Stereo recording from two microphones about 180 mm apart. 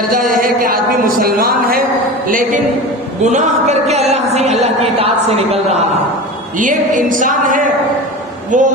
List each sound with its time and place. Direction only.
0.1 s speech: 50° right (ahead or behind)
3.2 s speech: 40° right (ahead or behind)
6.6 s music: 45° right (ahead or behind)